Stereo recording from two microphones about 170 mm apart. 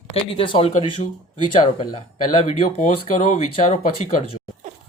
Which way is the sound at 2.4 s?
45° left (ahead or behind).